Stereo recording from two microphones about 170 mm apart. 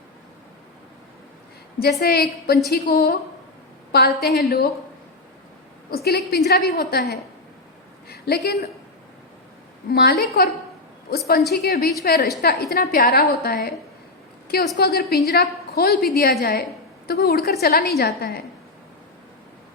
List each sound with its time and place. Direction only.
1.8 s a woman's voice: 70° left (ahead or behind)
5.9 s a woman's voice: 65° left (ahead or behind)
9.9 s a woman's voice: 70° left (ahead or behind)
11.5 s a woman's voice: 65° left (ahead or behind)
12.8 s a woman's voice: 50° left (ahead or behind)
14.8 s a woman's voice: 65° left (ahead or behind)